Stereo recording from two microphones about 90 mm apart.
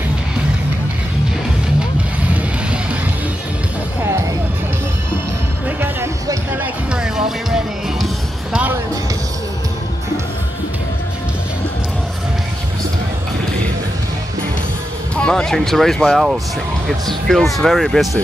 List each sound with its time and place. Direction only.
6.5 s music: 20° right (ahead or behind)
7.0 s music: 5° right (ahead or behind)
15.1 s speech: 10° left (ahead or behind)